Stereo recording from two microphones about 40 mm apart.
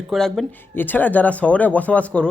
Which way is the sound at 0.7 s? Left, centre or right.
Left.